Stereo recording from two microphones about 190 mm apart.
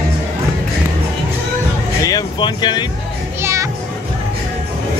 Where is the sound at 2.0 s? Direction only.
20° left (ahead or behind).